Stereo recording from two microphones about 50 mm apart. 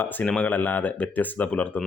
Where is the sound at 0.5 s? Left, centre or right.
Left.